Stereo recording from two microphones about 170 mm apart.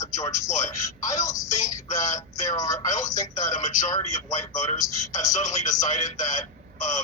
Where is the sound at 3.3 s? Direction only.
45° left (ahead or behind).